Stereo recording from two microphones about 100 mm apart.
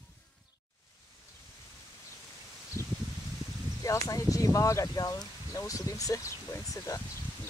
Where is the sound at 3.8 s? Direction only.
35° left (ahead or behind).